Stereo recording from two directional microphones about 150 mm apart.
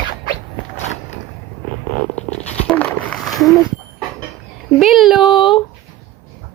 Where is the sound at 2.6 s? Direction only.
10° left (ahead or behind).